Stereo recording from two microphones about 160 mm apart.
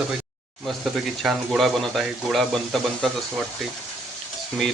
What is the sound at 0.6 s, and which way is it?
Speech, centre (ahead or behind).